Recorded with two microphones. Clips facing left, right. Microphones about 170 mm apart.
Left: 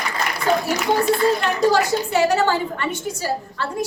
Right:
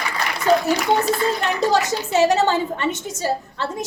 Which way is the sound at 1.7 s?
20° right (ahead or behind).